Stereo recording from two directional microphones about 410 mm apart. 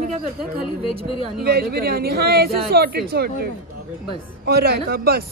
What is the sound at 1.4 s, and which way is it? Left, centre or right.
Speech, right.